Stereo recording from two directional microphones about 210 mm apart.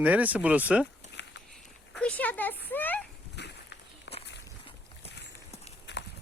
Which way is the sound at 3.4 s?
55° left (ahead or behind).